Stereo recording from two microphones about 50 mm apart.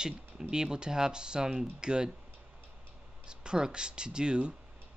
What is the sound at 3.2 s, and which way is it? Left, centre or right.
Speech, centre.